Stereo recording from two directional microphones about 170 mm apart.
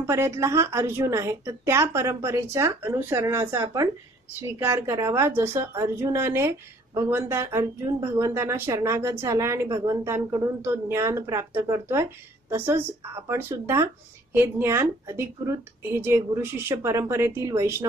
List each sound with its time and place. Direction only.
0.0 s a woman's voice: 15° right (ahead or behind)